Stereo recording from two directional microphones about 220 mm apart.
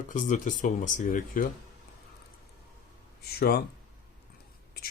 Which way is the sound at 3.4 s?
45° left (ahead or behind).